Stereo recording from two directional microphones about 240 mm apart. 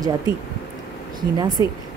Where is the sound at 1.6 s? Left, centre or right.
Centre.